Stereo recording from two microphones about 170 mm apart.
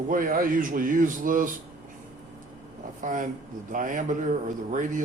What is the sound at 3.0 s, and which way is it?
Speech, 50° right (ahead or behind).